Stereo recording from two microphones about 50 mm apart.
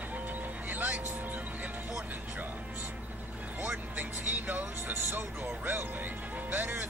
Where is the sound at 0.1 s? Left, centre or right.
Right.